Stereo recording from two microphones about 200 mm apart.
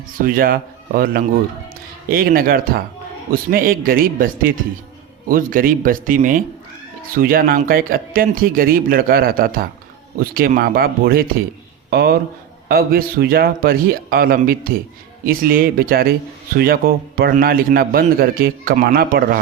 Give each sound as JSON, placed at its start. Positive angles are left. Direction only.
{"t": 0.1, "sound": "a man's voice", "side_deg": -45}